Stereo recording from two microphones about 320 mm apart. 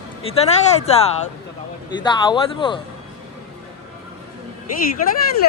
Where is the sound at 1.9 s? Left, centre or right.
Centre.